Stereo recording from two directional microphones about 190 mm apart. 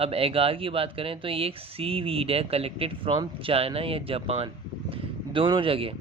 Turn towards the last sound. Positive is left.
turn(degrees=-30)  # may be behind; listen again after turning